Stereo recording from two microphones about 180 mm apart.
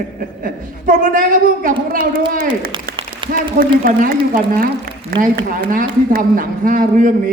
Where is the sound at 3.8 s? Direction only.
55° right (ahead or behind).